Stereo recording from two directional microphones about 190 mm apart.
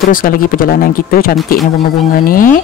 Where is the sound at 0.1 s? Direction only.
45° left (ahead or behind).